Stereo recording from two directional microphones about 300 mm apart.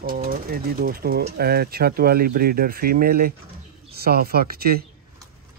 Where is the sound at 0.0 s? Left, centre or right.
Right.